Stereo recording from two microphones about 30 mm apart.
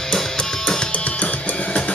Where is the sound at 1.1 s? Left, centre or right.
Left.